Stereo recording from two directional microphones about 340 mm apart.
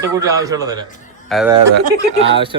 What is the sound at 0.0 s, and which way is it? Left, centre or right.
A man's voice, centre.